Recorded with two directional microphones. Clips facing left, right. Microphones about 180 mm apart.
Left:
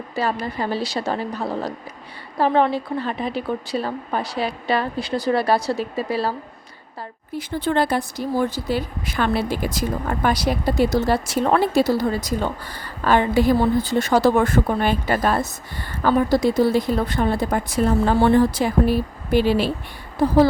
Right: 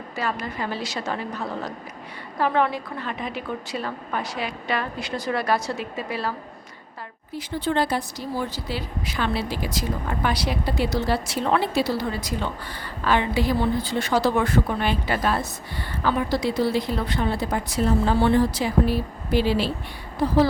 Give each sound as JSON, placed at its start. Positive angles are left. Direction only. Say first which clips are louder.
{"t": 0.2, "sound": "a woman's voice", "louder": "left 4 dB", "side_deg": 35}
{"t": 7.3, "sound": "speech", "louder": "left 3 dB", "side_deg": 55}